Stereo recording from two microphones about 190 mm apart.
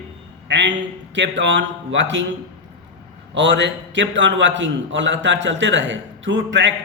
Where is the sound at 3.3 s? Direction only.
70° right (ahead or behind).